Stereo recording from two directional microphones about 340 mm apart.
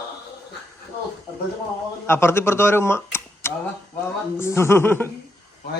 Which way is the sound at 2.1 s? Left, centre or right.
Centre.